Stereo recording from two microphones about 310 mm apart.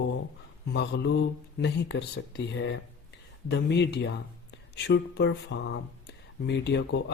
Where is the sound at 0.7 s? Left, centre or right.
Left.